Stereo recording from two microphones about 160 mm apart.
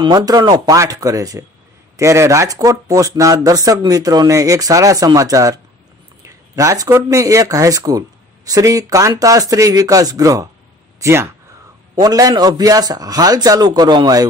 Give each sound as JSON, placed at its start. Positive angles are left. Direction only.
{"t": 0.0, "sound": "speech", "side_deg": -25}